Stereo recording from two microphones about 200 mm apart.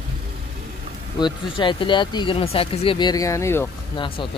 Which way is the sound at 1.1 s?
25° left (ahead or behind).